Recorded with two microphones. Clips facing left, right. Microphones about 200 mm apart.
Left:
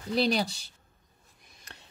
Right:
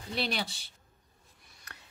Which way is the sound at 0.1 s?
35° left (ahead or behind).